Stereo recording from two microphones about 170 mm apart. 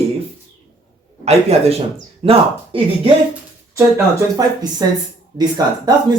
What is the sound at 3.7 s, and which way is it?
Speech, 20° right (ahead or behind).